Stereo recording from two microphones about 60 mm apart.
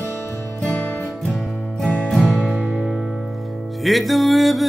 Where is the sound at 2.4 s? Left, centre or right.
Right.